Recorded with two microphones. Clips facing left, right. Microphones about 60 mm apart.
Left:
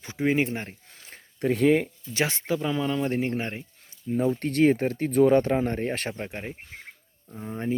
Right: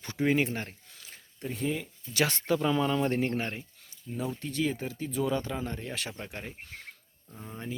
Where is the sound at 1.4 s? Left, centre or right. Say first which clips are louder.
Left 12 dB; left.